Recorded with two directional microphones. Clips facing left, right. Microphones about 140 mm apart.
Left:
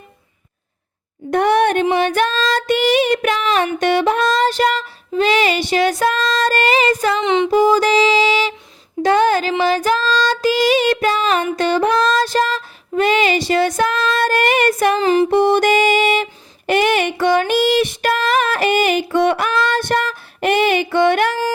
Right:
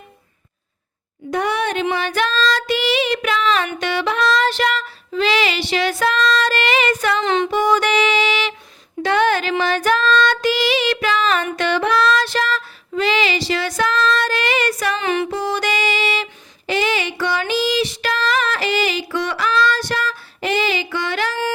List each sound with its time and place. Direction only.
1.3 s a sound: 55° left (ahead or behind)
2.0 s child singing: 50° left (ahead or behind)
7.0 s female singing: 25° left (ahead or behind)
7.5 s music: 35° left (ahead or behind)
9.0 s a sound: 40° left (ahead or behind)
9.6 s female singing: 35° left (ahead or behind); by 14.9 s 50° left (ahead or behind)
14.9 s music: 35° left (ahead or behind)
15.4 s music: 50° left (ahead or behind)